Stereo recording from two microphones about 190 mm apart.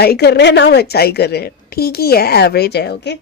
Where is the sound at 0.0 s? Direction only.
60° left (ahead or behind).